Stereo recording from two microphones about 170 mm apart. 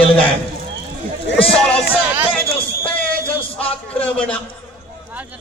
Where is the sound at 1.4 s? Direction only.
5° left (ahead or behind).